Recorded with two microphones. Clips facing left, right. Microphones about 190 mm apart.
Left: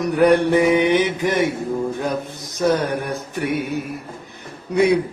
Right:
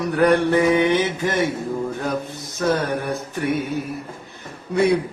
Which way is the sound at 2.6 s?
15° left (ahead or behind).